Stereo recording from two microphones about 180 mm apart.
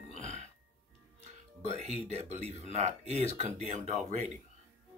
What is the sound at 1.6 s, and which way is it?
Speech, 35° right (ahead or behind).